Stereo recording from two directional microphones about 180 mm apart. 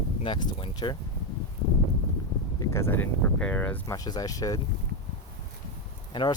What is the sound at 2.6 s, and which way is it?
Speech, 15° left (ahead or behind).